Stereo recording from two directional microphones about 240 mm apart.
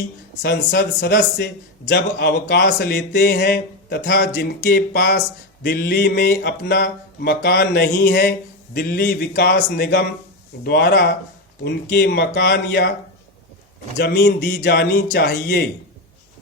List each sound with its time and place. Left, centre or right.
0.4 s a man's voice: left
14.0 s a man's voice: left